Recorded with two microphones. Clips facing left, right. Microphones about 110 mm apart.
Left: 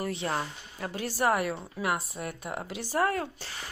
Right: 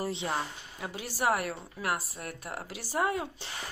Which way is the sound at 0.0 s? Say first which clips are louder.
Left 1 dB; 20° right (ahead or behind).